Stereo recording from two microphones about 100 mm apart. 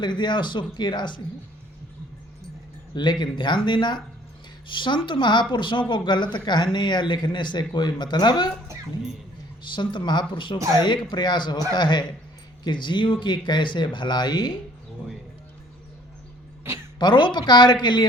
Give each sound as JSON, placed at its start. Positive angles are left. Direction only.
{"t": 0.0, "sound": "speech", "side_deg": 50}
{"t": 2.9, "sound": "speech", "side_deg": 50}
{"t": 9.7, "sound": "speech", "side_deg": 50}
{"t": 17.0, "sound": "speech", "side_deg": 50}